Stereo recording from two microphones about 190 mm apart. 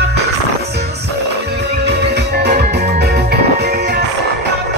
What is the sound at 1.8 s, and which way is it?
Music, 60° right (ahead or behind).